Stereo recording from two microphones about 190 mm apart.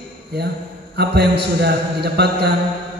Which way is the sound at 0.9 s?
60° right (ahead or behind).